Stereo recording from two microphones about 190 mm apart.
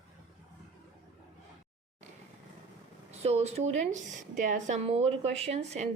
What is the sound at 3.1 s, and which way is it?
A woman's voice, 35° right (ahead or behind).